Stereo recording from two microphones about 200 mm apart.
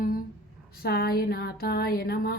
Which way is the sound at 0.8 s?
50° left (ahead or behind).